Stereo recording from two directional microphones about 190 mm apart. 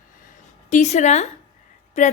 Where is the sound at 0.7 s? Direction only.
40° left (ahead or behind).